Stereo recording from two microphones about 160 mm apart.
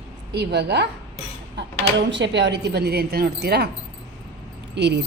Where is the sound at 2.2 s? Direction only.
90° right.